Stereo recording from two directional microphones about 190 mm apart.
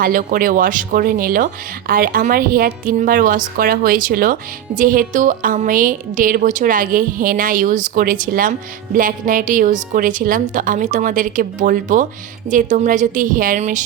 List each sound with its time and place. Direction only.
0.0 s a woman's voice: 45° right (ahead or behind)